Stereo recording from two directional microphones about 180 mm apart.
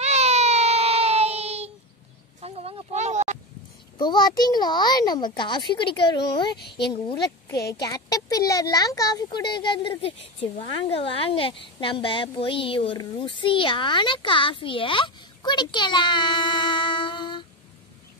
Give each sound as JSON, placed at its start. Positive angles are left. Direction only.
{"t": 0.0, "sound": "child singing", "side_deg": -35}
{"t": 2.4, "sound": "a sound", "side_deg": -35}
{"t": 4.0, "sound": "speech", "side_deg": 25}
{"t": 7.8, "sound": "speech", "side_deg": 20}